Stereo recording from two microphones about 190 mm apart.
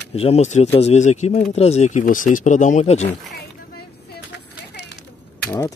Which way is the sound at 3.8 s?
60° left (ahead or behind).